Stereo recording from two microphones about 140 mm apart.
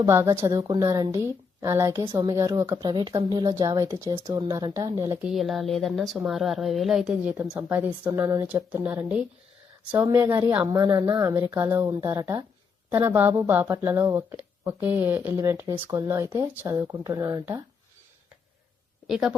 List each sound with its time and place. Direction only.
0.0 s speech: 20° right (ahead or behind)
1.9 s speech: 30° right (ahead or behind)
2.3 s speech: 20° right (ahead or behind)
5.2 s a woman's voice: centre (ahead or behind)
8.2 s speech: 20° right (ahead or behind)
19.0 s a woman's voice: 5° right (ahead or behind)